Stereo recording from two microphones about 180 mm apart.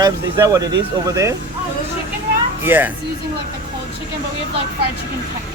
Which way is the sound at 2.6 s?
10° right (ahead or behind).